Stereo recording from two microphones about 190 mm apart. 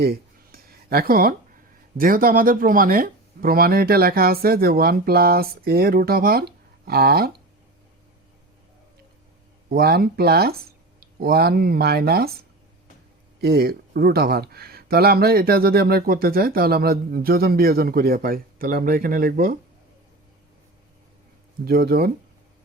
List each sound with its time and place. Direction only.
0.0 s a sound: 55° right (ahead or behind)
2.0 s speech: 50° right (ahead or behind)
9.6 s speech: 55° right (ahead or behind)
13.4 s speech: 55° right (ahead or behind)
21.6 s speech: 55° right (ahead or behind)